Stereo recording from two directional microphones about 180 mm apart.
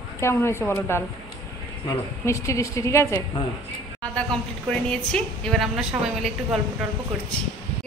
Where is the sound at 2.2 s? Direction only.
15° left (ahead or behind).